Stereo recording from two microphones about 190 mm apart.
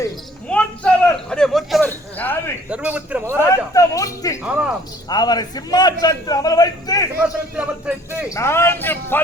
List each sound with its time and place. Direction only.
0.4 s a sound: 5° left (ahead or behind)
2.6 s a man's voice: 5° right (ahead or behind)
3.3 s speech: 15° left (ahead or behind)
4.4 s speech: 5° right (ahead or behind)
5.0 s a man's voice: 20° left (ahead or behind)
7.5 s a man's voice: 10° right (ahead or behind)
8.3 s speech: 15° left (ahead or behind)